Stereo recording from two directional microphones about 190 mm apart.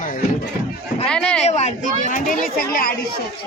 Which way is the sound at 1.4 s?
35° left (ahead or behind).